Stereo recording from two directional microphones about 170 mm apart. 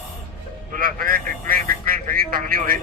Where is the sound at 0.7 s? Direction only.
55° right (ahead or behind).